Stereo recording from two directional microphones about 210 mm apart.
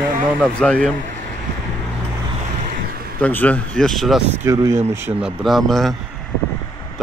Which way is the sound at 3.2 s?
5° left (ahead or behind).